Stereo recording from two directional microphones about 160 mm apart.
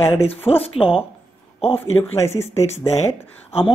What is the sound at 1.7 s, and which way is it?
Speech, 15° left (ahead or behind).